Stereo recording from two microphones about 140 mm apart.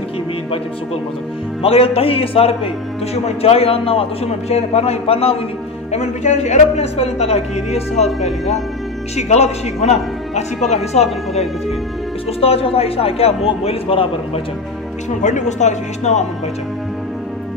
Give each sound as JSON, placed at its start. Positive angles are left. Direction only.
{"t": 1.6, "sound": "a woman's voice", "side_deg": 45}
{"t": 5.9, "sound": "a woman's voice", "side_deg": 55}
{"t": 15.2, "sound": "speech", "side_deg": 60}